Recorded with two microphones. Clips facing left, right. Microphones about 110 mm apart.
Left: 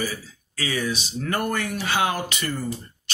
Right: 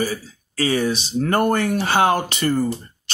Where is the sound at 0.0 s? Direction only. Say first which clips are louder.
Right 6 dB; 35° right (ahead or behind).